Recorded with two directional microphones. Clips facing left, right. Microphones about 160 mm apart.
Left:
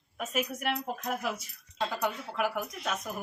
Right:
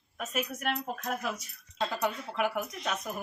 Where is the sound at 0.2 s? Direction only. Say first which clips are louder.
Left 2 dB; 10° left (ahead or behind).